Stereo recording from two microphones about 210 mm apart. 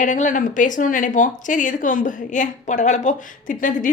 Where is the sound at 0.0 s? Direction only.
35° left (ahead or behind).